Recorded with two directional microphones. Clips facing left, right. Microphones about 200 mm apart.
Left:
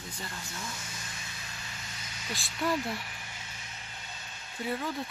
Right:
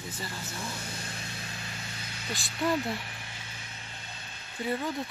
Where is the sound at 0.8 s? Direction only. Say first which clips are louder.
Right 5 dB; 60° right (ahead or behind).